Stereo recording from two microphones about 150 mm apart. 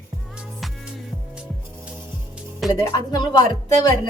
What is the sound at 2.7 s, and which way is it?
Speech, 25° left (ahead or behind).